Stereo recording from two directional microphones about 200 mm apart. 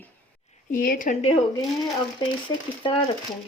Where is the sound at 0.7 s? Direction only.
45° left (ahead or behind).